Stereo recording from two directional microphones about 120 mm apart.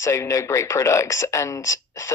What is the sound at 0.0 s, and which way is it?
Speech, 25° left (ahead or behind).